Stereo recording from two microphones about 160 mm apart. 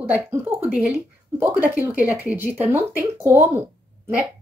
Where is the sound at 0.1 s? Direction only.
15° right (ahead or behind).